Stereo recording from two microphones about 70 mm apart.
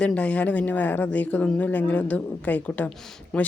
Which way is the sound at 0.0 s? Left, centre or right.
Centre.